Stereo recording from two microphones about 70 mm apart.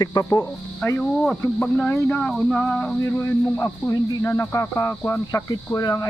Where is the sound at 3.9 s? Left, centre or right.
Left.